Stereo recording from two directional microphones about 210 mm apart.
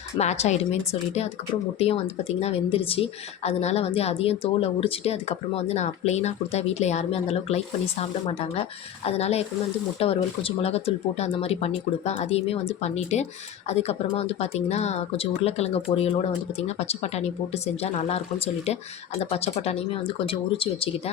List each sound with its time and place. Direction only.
0.2 s speech: 30° left (ahead or behind)